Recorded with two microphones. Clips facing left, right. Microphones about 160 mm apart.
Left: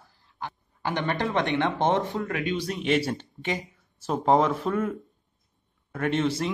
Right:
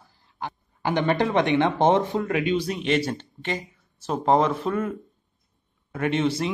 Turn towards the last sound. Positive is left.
turn(degrees=-5)  # may be behind; listen again after turning